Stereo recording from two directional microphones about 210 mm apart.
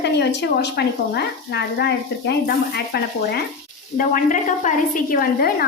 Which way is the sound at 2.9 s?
50° left (ahead or behind).